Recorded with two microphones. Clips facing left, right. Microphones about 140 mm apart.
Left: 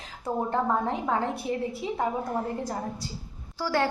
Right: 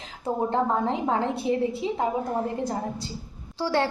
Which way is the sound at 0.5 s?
25° right (ahead or behind).